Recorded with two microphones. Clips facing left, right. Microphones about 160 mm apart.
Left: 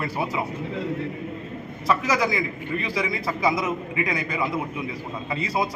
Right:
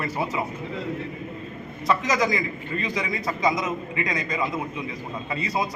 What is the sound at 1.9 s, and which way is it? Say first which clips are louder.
A man's voice: even; 10° left (ahead or behind).